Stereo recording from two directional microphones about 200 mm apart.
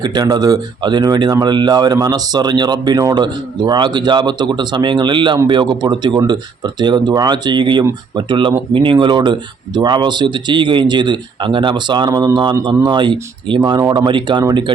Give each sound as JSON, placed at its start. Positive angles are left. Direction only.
{"t": 0.0, "sound": "speech", "side_deg": -20}